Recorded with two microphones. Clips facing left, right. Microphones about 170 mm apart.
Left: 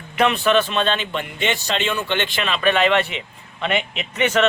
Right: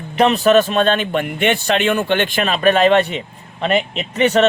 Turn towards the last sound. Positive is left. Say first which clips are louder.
# right 5 dB
turn(degrees=-35)  # may be behind; listen again after turning